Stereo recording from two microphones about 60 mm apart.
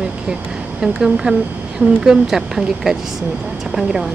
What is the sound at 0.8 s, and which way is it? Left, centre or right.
Speech, centre.